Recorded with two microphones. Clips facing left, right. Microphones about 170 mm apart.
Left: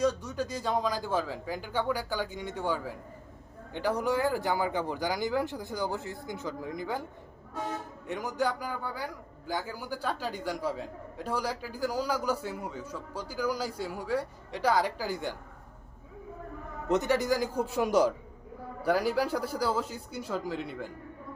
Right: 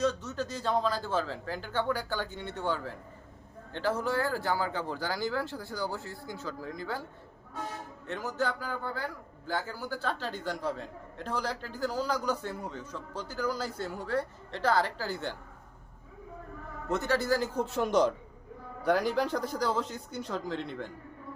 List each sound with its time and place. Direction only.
0.0 s a man's voice: 10° left (ahead or behind)
8.0 s a man's voice: 15° left (ahead or behind)
16.9 s a man's voice: 15° left (ahead or behind)